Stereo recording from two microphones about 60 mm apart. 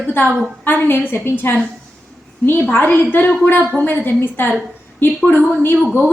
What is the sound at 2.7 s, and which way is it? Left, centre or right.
A woman's voice, left.